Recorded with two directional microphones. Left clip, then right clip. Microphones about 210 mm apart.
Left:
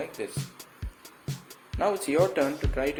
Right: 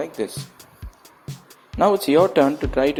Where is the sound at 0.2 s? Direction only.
30° right (ahead or behind).